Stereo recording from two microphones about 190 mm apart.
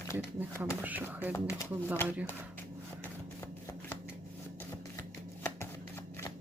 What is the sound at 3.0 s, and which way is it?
Shuffling cards, 10° left (ahead or behind).